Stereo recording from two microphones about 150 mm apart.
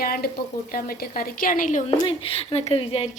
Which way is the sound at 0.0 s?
80° left.